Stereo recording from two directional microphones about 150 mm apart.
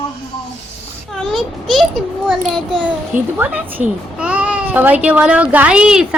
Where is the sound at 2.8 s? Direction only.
10° right (ahead or behind).